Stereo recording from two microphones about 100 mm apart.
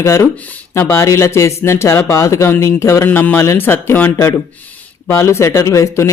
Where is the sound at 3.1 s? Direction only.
15° left (ahead or behind).